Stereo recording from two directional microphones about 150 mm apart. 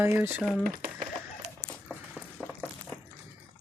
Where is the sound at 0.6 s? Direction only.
65° right (ahead or behind).